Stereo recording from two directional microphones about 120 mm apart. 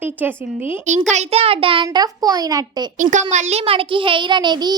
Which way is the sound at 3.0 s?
90° right.